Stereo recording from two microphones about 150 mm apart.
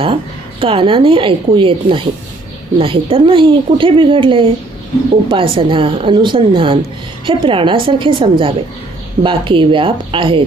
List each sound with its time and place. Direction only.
0.6 s speech: 35° right (ahead or behind)